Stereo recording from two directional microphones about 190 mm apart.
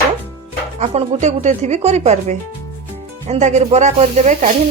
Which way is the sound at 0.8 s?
35° right (ahead or behind).